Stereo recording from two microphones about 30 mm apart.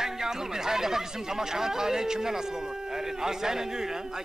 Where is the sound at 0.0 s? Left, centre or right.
Centre.